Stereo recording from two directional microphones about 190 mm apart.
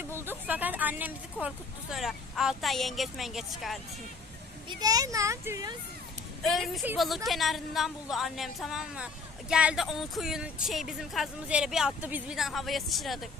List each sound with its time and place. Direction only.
0.3 s speech: 10° right (ahead or behind)
4.7 s speech: 20° right (ahead or behind)
6.4 s speech: centre (ahead or behind)